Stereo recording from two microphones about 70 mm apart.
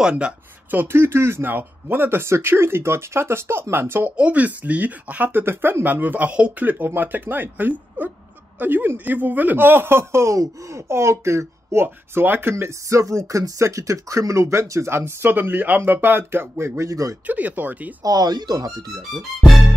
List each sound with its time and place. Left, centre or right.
0.7 s speech: right
4.2 s speech: right
17.3 s speech: right
18.0 s speech: right
19.1 s speech: centre